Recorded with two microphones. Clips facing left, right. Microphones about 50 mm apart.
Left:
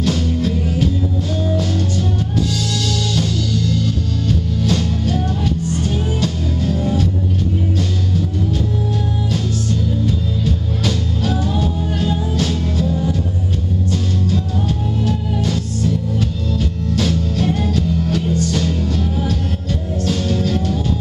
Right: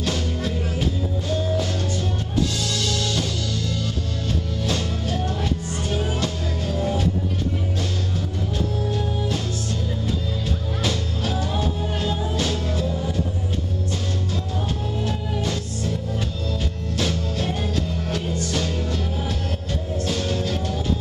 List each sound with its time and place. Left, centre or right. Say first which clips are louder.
0.0 s music: left 7 dB; centre
4.6 s music: left 7 dB; centre
10.4 s music: left 5 dB; centre
15.0 s music: left 6 dB; centre